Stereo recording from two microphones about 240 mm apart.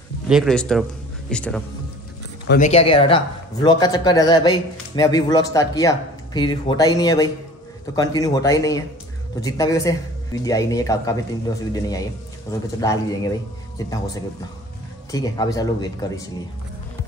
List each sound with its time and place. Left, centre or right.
0.3 s speech: centre
2.4 s speech: left
2.7 s a man's voice: left